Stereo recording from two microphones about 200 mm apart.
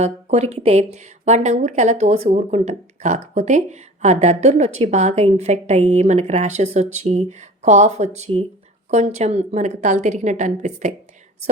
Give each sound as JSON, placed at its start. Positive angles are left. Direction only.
{"t": 0.0, "sound": "speech", "side_deg": -35}